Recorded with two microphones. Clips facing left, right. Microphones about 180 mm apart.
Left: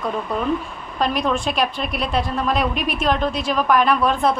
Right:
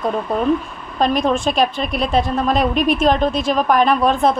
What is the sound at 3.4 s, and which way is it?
Speech, 25° right (ahead or behind).